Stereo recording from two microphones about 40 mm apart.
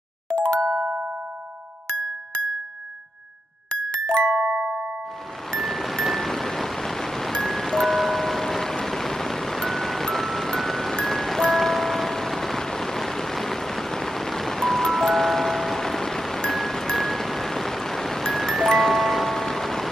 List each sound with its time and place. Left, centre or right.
0.3 s music: left
3.7 s music: left
5.6 s music: centre